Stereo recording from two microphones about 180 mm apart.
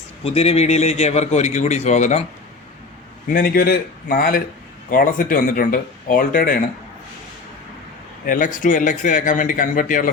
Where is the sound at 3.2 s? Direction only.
50° left (ahead or behind).